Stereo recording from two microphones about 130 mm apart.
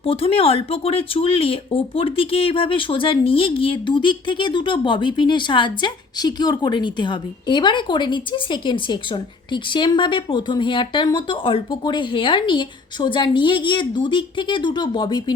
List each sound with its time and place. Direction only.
0.0 s speech: 45° left (ahead or behind)